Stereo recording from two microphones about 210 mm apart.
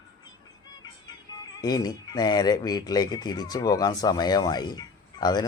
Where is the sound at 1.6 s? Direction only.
20° left (ahead or behind).